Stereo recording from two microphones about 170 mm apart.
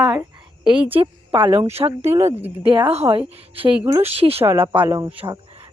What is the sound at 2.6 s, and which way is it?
A woman's voice, 30° right (ahead or behind).